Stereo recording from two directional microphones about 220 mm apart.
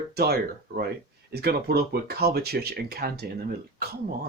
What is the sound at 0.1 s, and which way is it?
Speech, 45° right (ahead or behind).